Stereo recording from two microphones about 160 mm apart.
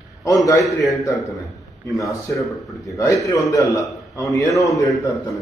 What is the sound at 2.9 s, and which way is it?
A man's voice, 20° left (ahead or behind).